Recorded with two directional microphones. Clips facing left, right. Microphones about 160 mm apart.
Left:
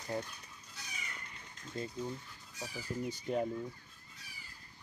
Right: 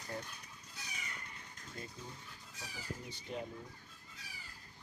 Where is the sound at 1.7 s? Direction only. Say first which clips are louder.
Left 8 dB; 25° left (ahead or behind).